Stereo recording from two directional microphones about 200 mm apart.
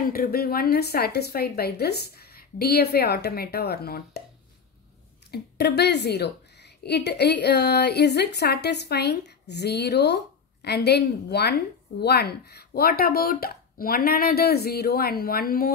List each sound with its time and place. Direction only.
0.1 s speech: 50° left (ahead or behind)
5.3 s a woman's voice: 55° left (ahead or behind)